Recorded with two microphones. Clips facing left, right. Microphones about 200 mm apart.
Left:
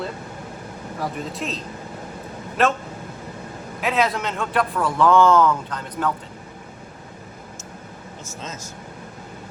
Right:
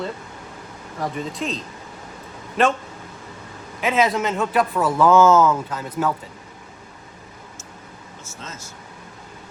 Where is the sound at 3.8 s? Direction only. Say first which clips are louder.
Right 2 dB; centre (ahead or behind).